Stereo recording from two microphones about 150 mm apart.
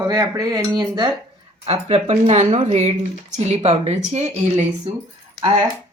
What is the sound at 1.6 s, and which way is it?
Speech, 40° right (ahead or behind).